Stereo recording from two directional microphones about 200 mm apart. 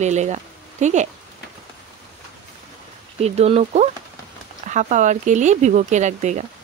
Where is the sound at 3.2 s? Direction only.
30° right (ahead or behind).